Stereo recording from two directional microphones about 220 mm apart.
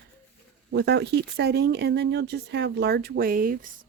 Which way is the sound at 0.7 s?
50° right (ahead or behind).